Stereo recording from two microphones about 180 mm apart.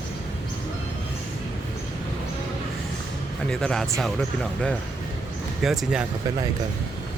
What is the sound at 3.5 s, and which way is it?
Speech, 5° left (ahead or behind).